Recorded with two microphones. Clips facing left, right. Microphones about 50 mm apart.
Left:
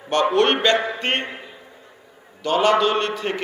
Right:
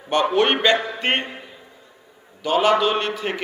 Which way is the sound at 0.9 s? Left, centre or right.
Centre.